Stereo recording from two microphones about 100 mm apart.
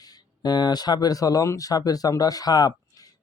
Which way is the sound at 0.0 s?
45° left (ahead or behind).